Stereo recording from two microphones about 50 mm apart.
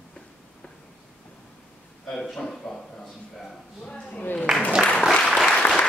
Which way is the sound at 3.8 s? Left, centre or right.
Centre.